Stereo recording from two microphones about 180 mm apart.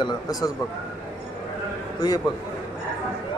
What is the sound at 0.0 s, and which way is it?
Speech, 20° left (ahead or behind).